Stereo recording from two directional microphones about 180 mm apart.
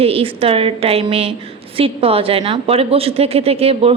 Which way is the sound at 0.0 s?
30° right (ahead or behind).